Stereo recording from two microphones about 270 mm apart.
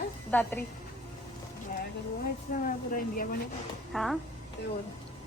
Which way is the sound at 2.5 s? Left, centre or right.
Left.